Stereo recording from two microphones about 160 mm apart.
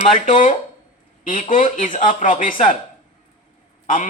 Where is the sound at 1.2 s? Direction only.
55° left (ahead or behind).